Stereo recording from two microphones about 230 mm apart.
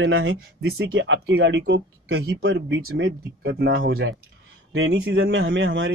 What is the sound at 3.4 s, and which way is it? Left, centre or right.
Speech, right.